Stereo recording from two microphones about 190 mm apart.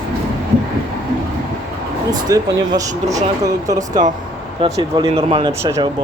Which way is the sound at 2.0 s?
20° right (ahead or behind).